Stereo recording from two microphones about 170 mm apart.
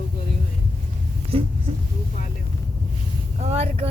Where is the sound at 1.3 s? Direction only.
35° right (ahead or behind).